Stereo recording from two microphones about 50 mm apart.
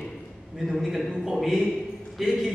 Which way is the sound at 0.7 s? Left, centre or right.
Centre.